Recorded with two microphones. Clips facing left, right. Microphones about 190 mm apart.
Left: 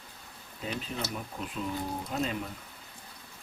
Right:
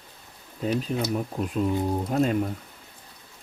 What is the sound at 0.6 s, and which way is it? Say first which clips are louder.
Speech: right 10 dB; 40° right (ahead or behind).